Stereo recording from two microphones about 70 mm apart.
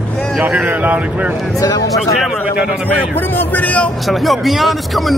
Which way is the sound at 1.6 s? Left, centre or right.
Left.